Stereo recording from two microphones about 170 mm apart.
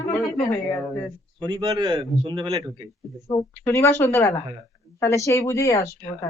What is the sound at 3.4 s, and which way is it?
A woman's voice, 15° left (ahead or behind).